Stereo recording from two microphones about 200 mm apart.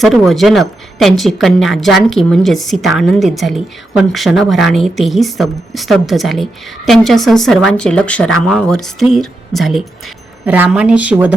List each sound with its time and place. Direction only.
0.0 s a woman's voice: centre (ahead or behind)